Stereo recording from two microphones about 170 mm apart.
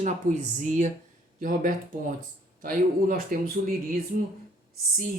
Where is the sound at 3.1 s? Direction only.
55° right (ahead or behind).